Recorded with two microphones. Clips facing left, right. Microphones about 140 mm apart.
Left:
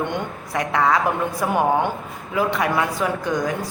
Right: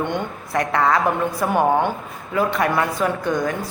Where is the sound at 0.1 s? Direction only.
10° left (ahead or behind).